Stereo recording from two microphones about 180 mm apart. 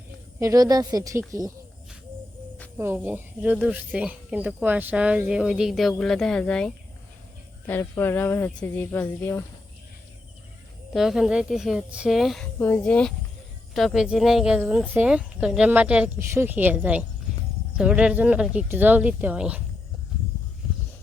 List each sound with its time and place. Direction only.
0.3 s a woman's voice: 20° right (ahead or behind)
2.7 s a woman's voice: 15° right (ahead or behind); by 6.7 s 5° left (ahead or behind)
7.7 s speech: 10° left (ahead or behind)
10.9 s speech: centre (ahead or behind)
12.5 s a woman's voice: 10° left (ahead or behind); by 19.6 s 10° right (ahead or behind)